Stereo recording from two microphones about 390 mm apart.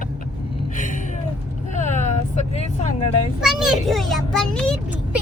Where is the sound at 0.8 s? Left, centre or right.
Centre.